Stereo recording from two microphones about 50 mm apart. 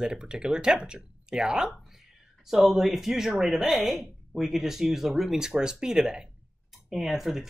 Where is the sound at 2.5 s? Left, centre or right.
Centre.